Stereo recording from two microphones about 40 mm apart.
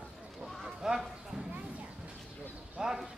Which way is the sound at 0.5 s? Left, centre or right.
Centre.